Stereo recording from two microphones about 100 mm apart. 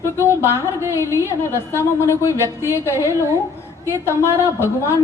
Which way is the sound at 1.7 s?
25° left (ahead or behind).